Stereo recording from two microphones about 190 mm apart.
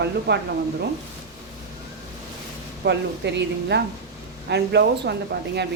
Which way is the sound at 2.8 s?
65° right (ahead or behind).